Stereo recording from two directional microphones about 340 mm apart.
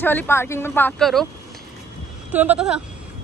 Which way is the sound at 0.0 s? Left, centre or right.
Centre.